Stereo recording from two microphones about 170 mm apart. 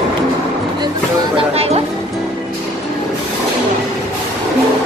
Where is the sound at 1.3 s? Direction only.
35° right (ahead or behind).